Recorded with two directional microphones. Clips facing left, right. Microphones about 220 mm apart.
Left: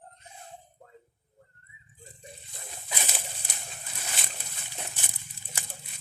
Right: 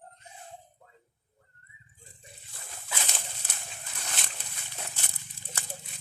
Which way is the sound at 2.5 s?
20° left (ahead or behind).